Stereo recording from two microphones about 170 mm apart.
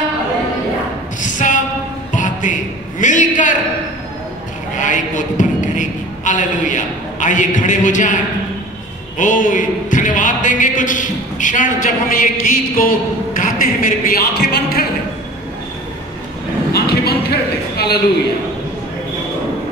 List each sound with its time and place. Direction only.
1.2 s a sound: 50° left (ahead or behind)
4.7 s a man's voice: 50° left (ahead or behind)
9.2 s a man's voice: 50° left (ahead or behind)
16.7 s a man's voice: 65° left (ahead or behind)